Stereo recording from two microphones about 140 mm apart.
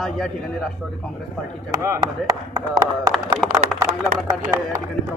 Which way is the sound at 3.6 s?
65° right (ahead or behind).